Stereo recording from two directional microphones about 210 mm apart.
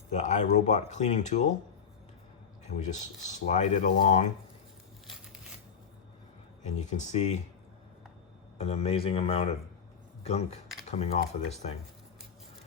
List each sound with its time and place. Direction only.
0.1 s speech: 35° left (ahead or behind)
2.6 s speech: 35° left (ahead or behind)
6.6 s speech: 35° left (ahead or behind)
8.5 s speech: 30° left (ahead or behind)